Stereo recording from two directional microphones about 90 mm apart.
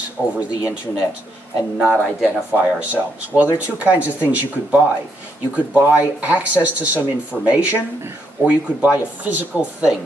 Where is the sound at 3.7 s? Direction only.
15° right (ahead or behind).